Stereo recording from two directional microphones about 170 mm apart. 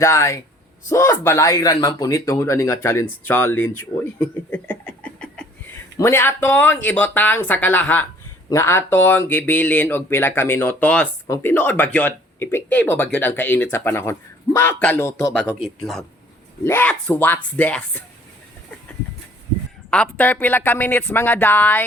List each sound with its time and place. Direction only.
0.0 s speech: 15° left (ahead or behind)
19.9 s speech: 10° left (ahead or behind)